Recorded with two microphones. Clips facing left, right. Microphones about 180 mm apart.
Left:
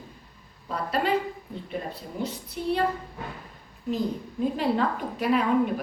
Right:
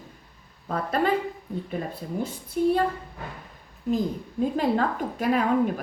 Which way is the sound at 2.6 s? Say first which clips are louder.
Right 8 dB; 45° right (ahead or behind).